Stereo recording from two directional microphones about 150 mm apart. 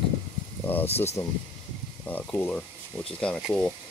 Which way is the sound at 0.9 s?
15° left (ahead or behind).